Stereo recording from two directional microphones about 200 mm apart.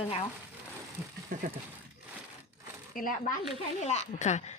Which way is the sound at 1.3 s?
40° right (ahead or behind).